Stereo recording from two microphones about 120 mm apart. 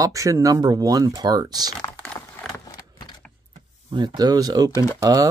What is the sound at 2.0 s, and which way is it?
Typing, 5° left (ahead or behind).